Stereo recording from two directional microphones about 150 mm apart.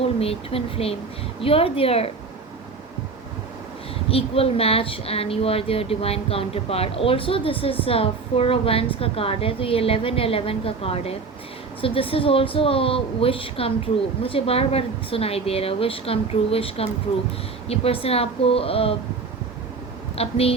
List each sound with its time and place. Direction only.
0.2 s speech: 40° left (ahead or behind)
4.1 s speech: 40° left (ahead or behind)
20.1 s speech: 40° left (ahead or behind)